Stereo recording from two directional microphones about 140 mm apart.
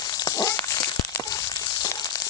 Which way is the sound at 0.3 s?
25° left (ahead or behind).